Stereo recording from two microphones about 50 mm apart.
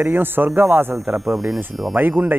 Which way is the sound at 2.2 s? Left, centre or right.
Right.